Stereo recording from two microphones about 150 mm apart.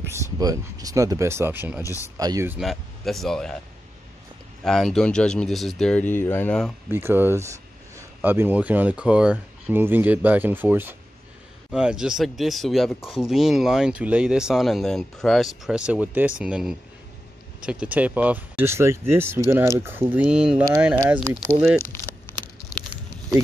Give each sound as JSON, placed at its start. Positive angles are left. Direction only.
{"t": 0.1, "sound": "speech", "side_deg": -20}
{"t": 2.6, "sound": "speech", "side_deg": 0}
{"t": 4.6, "sound": "speech", "side_deg": 0}
{"t": 6.9, "sound": "speech", "side_deg": -15}